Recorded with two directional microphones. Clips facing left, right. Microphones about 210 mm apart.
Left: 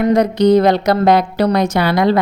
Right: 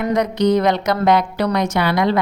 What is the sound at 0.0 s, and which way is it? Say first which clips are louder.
A woman's voice: left 5 dB; 30° left (ahead or behind).